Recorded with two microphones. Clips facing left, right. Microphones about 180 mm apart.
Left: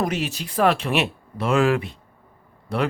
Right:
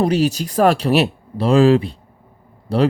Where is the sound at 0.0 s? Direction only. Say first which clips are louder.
Right 8 dB; 35° right (ahead or behind).